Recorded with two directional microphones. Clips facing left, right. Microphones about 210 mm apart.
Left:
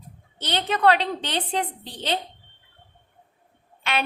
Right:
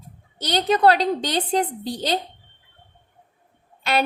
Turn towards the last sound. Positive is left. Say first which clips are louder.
# right 5 dB
turn(degrees=-40)  # may be behind; listen again after turning